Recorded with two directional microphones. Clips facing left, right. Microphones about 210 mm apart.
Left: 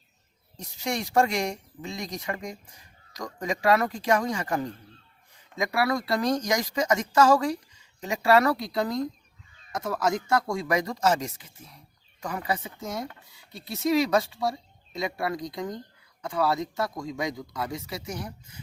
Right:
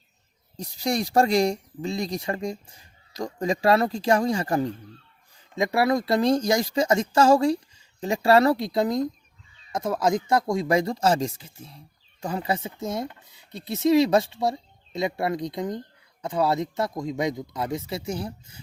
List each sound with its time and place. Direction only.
0.5 s speech: 35° right (ahead or behind)